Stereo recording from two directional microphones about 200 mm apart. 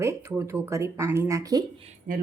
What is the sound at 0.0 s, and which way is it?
Speech, 15° right (ahead or behind).